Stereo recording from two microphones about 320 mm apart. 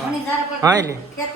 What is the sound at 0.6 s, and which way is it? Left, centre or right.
Speech, centre.